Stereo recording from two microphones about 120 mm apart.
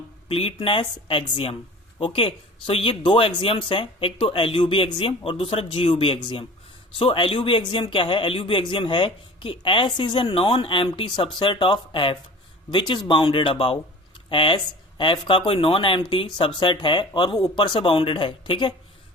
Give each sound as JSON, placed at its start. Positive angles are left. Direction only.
{"t": 0.3, "sound": "speech", "side_deg": 50}